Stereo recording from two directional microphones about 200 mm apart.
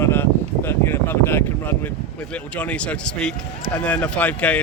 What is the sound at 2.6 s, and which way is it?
Speech, 5° left (ahead or behind).